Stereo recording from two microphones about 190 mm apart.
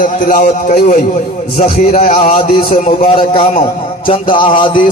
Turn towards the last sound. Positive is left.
turn(degrees=25)  # may be behind; listen again after turning